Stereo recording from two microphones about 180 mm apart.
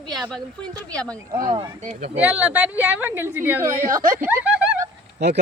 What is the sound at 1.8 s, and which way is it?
Speech, 40° right (ahead or behind).